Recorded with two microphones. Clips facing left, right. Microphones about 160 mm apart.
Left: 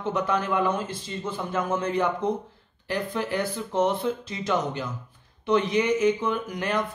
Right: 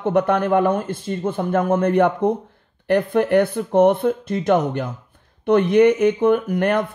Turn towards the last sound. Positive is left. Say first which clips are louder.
# right 9 dB
turn(degrees=-55)  # may be behind; listen again after turning